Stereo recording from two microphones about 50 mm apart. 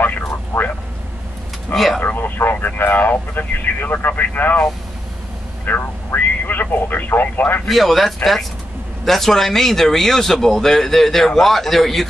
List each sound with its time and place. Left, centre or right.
2.0 s speech: left
5.7 s speech: left
7.6 s speech: centre